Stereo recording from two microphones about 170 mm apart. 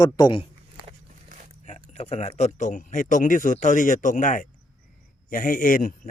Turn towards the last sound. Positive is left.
turn(degrees=55)  # may be behind; listen again after turning